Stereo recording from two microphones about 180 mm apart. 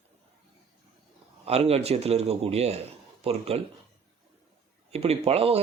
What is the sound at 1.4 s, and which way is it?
Speech, 35° right (ahead or behind).